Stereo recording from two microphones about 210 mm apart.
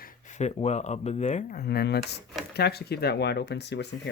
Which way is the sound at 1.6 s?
50° left (ahead or behind).